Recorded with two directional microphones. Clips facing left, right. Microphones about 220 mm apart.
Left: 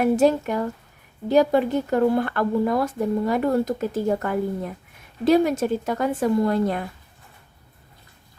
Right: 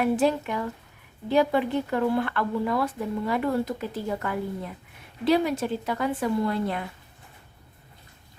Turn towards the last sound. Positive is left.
turn(degrees=45)  # may be behind; listen again after turning